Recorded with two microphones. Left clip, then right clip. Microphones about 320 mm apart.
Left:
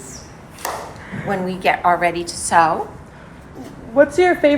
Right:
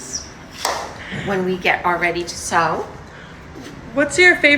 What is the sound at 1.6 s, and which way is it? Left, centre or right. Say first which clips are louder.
A woman's voice: left 4 dB; left.